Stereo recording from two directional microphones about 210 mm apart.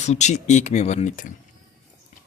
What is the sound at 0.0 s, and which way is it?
Speech, 35° left (ahead or behind).